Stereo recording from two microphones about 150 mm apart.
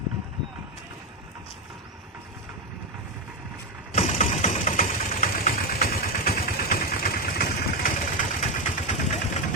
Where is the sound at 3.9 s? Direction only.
50° left (ahead or behind).